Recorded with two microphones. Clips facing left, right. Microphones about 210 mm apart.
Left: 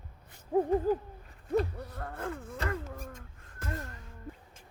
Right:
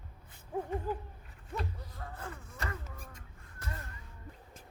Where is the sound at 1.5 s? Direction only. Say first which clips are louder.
Left 11 dB; 60° left (ahead or behind).